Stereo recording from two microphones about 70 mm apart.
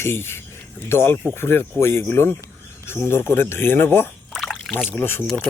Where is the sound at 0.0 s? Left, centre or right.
Left.